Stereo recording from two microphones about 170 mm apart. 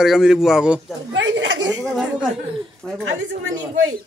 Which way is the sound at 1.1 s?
90° right.